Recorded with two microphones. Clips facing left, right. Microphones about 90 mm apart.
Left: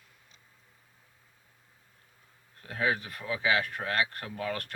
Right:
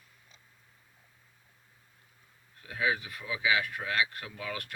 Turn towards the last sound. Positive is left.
turn(degrees=45)  # may be behind; listen again after turning